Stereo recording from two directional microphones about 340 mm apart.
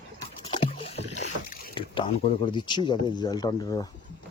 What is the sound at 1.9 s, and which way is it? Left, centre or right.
Speech, centre.